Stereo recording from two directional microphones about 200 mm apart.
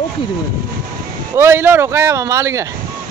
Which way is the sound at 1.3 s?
10° right (ahead or behind).